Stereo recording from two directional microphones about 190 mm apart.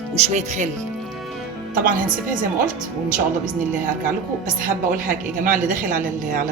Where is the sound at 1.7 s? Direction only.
50° right (ahead or behind).